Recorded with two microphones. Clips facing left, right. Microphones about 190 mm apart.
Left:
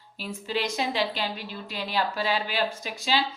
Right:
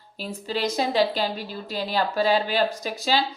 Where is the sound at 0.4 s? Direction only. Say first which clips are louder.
Right 3 dB; 40° right (ahead or behind).